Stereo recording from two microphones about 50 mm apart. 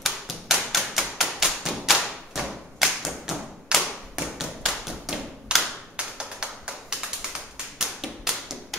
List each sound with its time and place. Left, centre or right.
0.0 s tap: centre
2.8 s thump: centre
3.7 s tap: centre
5.9 s tap: centre